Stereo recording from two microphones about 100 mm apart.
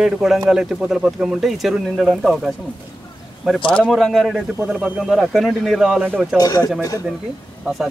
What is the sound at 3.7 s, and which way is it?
Speech, 5° left (ahead or behind).